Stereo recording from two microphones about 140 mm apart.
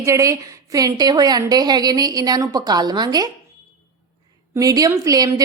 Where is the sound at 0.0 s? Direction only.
20° right (ahead or behind).